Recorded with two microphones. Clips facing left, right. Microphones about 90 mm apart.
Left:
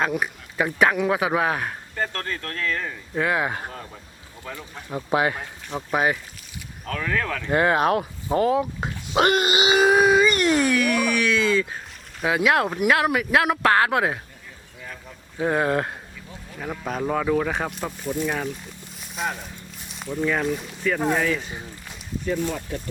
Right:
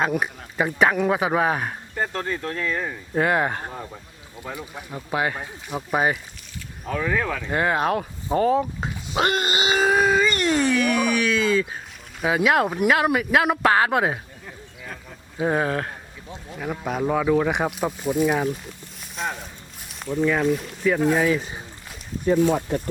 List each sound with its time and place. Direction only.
0.0 s speech: centre (ahead or behind)
3.2 s speech: 5° left (ahead or behind)
4.4 s speech: 15° right (ahead or behind)
4.9 s speech: 15° left (ahead or behind)
5.4 s speech: 10° right (ahead or behind)
7.5 s speech: 20° left (ahead or behind)
9.1 s wail: 20° left (ahead or behind)
10.5 s speech: 5° left (ahead or behind)
15.4 s speech: 5° right (ahead or behind)
18.9 s a sound: centre (ahead or behind)
19.8 s speech: centre (ahead or behind)